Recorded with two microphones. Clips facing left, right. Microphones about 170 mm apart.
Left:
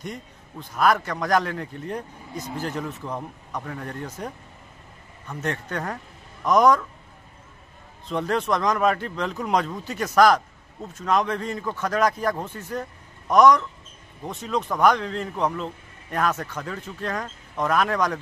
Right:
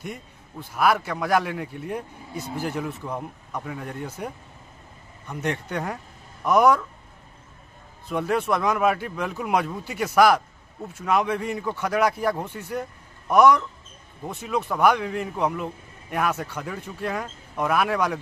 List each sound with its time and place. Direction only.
0.0 s speech: 5° right (ahead or behind)
5.3 s speech: 15° right (ahead or behind)
8.1 s speech: 10° right (ahead or behind)